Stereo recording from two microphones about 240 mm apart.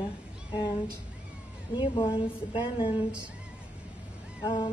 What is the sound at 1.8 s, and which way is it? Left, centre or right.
A woman's voice, centre.